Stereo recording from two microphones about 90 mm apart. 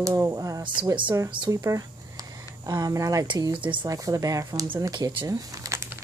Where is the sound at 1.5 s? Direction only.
35° right (ahead or behind).